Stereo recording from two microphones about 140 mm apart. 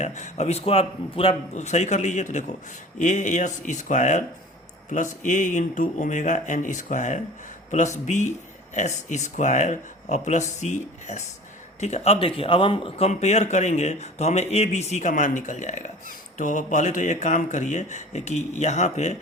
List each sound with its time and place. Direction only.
0.0 s speech: 55° left (ahead or behind); by 13.1 s 40° left (ahead or behind)
13.1 s speech: 55° left (ahead or behind)